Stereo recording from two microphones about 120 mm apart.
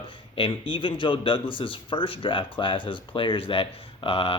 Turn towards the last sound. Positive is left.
turn(degrees=50)  # may be behind; listen again after turning